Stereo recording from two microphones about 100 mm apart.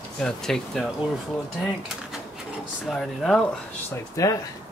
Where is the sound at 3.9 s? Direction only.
30° left (ahead or behind).